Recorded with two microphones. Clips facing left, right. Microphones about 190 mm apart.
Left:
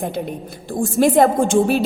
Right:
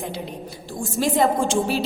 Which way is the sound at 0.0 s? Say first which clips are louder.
Left 6 dB; 55° left (ahead or behind).